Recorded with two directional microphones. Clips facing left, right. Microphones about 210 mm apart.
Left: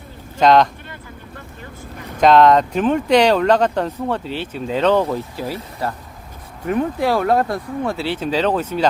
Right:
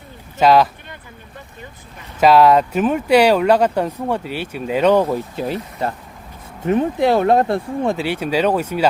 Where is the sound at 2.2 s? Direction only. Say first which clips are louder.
Even; 5° right (ahead or behind).